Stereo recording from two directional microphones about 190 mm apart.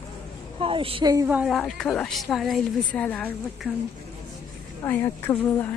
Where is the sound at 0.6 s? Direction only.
30° right (ahead or behind).